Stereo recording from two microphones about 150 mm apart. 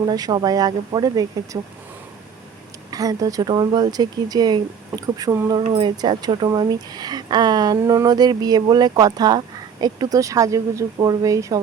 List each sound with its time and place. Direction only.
0.0 s speech: 25° right (ahead or behind)
2.9 s speech: 25° right (ahead or behind)